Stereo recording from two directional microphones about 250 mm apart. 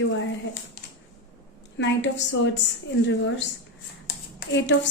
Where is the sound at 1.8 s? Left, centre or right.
Left.